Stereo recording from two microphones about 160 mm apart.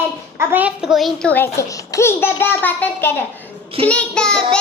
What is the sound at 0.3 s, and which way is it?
Speech, 10° right (ahead or behind).